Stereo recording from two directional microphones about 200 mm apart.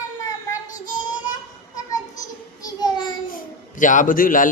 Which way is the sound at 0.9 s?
40° left (ahead or behind).